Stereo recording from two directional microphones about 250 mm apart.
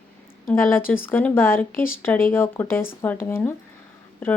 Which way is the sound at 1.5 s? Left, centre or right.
Left.